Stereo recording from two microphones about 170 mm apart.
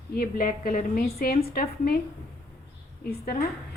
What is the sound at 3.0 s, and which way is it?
Speech, 60° left (ahead or behind).